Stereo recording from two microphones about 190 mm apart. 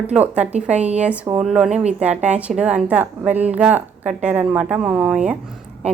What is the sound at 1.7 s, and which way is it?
Speech, 35° right (ahead or behind).